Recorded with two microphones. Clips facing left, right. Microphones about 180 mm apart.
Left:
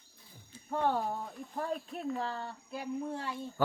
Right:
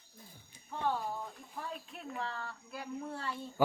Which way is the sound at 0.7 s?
55° left (ahead or behind).